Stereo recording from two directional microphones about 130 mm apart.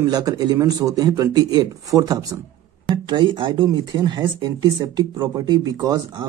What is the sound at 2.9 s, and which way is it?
A man's voice, 35° right (ahead or behind).